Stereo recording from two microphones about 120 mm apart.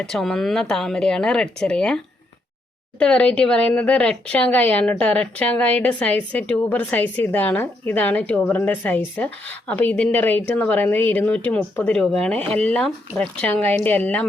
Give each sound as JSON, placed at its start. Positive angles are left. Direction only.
{"t": 0.0, "sound": "speech", "side_deg": 5}
{"t": 3.0, "sound": "speech", "side_deg": 10}